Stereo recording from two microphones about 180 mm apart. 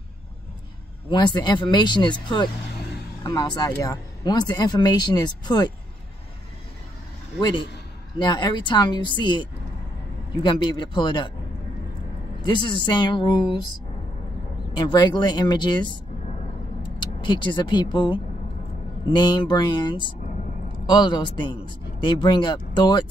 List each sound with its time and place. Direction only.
1.1 s speech: 25° left (ahead or behind)
7.3 s speech: 25° left (ahead or behind)
12.4 s speech: 25° left (ahead or behind)
14.8 s speech: 25° left (ahead or behind)
17.0 s speech: 25° left (ahead or behind)
20.2 s a sound: 45° left (ahead or behind)
20.8 s speech: 25° left (ahead or behind)